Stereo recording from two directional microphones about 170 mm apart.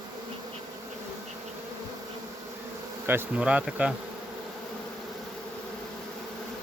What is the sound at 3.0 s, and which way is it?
Bee, 10° right (ahead or behind).